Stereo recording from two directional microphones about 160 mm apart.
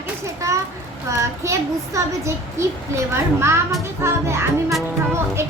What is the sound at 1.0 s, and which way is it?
A child's voice, 20° right (ahead or behind).